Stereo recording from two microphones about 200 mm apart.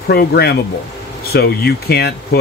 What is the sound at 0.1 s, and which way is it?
Speech, 50° left (ahead or behind).